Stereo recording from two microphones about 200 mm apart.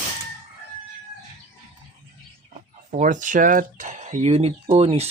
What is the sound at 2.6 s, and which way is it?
Speech, 40° right (ahead or behind).